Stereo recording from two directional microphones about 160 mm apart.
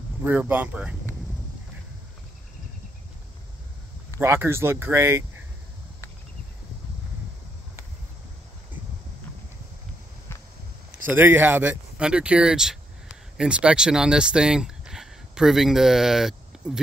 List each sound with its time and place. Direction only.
0.2 s speech: 10° right (ahead or behind)
4.2 s speech: 15° right (ahead or behind)
11.1 s speech: 10° right (ahead or behind)